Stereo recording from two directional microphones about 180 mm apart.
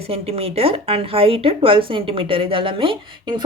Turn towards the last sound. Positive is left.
turn(degrees=-25)  # may be behind; listen again after turning